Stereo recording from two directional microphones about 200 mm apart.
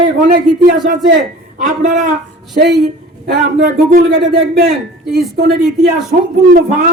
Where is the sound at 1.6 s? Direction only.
40° right (ahead or behind).